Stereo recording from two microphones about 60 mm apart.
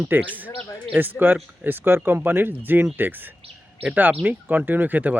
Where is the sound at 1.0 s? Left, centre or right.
Right.